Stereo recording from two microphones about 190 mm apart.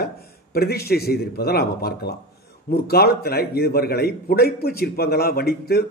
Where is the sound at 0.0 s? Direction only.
55° left (ahead or behind).